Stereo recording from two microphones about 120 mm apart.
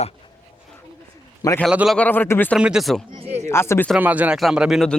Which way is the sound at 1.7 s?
10° right (ahead or behind).